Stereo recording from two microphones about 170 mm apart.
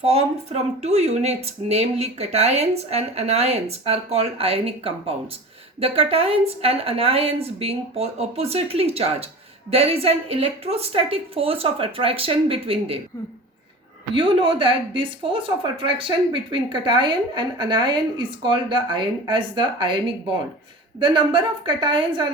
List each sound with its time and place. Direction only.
0.0 s speech: 35° right (ahead or behind)
14.2 s speech: 30° right (ahead or behind)
21.0 s speech: 30° right (ahead or behind)